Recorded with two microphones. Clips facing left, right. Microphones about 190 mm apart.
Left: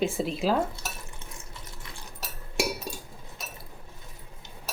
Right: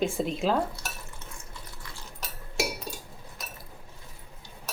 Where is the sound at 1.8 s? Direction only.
20° left (ahead or behind).